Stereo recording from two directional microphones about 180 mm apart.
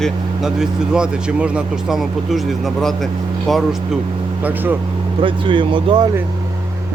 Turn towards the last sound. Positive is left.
turn(degrees=-25)  # may be behind; listen again after turning